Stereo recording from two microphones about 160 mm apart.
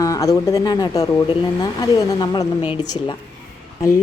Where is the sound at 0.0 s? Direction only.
20° left (ahead or behind).